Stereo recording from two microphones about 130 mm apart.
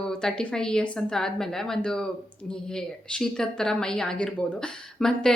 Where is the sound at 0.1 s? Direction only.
5° left (ahead or behind).